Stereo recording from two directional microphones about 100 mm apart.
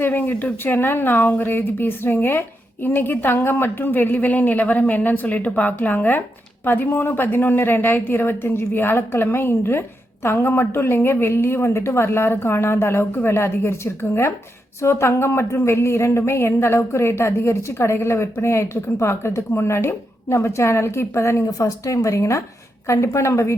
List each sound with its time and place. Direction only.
0.0 s speech: 20° left (ahead or behind)